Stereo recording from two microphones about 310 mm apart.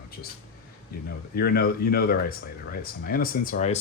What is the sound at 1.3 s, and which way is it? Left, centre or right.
Speech, left.